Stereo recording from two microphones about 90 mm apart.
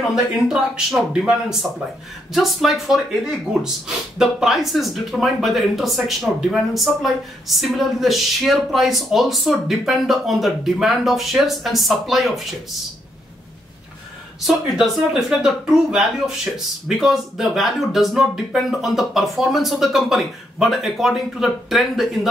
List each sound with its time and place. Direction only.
0.1 s speech: 5° right (ahead or behind)
2.3 s speech: centre (ahead or behind)
14.4 s speech: 5° right (ahead or behind)